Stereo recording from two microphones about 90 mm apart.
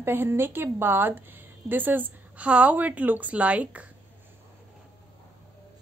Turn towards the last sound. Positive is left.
turn(degrees=-15)  # may be behind; listen again after turning